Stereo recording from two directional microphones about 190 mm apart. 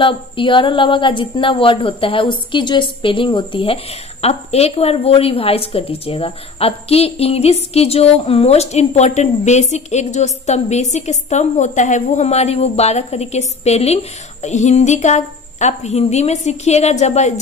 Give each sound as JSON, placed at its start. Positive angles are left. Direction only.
{"t": 0.0, "sound": "a woman's voice", "side_deg": 25}